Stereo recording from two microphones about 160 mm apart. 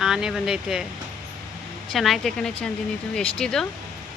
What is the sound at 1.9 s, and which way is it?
Speech, centre (ahead or behind).